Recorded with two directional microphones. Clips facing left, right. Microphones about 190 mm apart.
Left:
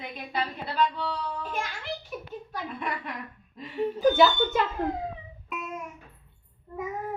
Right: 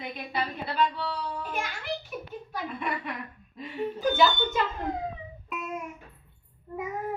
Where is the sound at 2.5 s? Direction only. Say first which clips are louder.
Right 1 dB; 5° right (ahead or behind).